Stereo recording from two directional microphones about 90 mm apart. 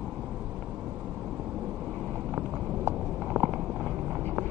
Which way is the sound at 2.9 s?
25° right (ahead or behind).